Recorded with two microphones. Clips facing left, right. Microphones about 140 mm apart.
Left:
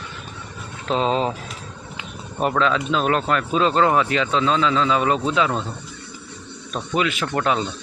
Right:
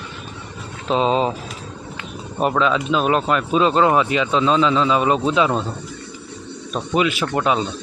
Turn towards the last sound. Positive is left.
turn(degrees=-20)  # may be behind; listen again after turning